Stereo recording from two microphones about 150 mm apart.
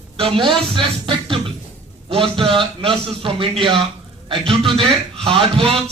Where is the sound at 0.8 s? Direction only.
35° right (ahead or behind).